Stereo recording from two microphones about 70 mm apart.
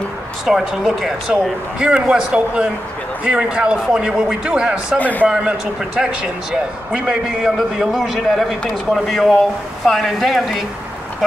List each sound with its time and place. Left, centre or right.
0.5 s speech: centre
4.9 s a man's voice: left
5.3 s a man's voice: centre